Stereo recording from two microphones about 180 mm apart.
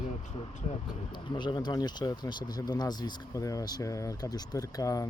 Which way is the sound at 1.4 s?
25° left (ahead or behind).